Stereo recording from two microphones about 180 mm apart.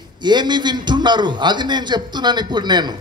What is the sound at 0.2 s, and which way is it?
Speech, 25° right (ahead or behind).